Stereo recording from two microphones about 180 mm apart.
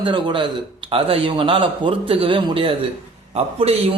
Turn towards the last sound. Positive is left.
turn(degrees=-35)  # may be behind; listen again after turning